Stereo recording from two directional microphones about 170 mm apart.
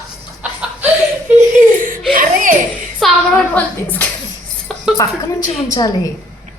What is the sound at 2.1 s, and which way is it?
Giggle, 50° right (ahead or behind).